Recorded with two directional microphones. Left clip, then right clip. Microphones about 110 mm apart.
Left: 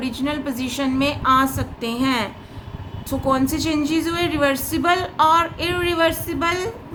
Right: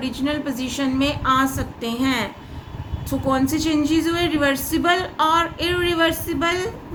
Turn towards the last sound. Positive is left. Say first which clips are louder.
# even
turn(degrees=50)  # may be behind; listen again after turning